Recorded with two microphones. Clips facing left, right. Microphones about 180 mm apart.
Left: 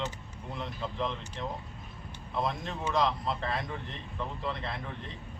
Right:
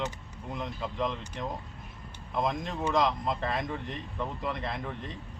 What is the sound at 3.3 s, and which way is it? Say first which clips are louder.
Speech: right 2 dB; 20° right (ahead or behind).